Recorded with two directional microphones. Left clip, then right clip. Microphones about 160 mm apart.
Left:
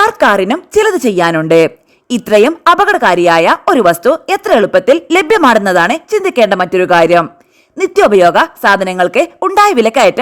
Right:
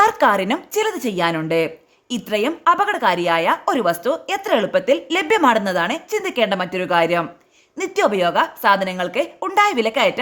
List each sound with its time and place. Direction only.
0.0 s a woman's voice: 35° left (ahead or behind)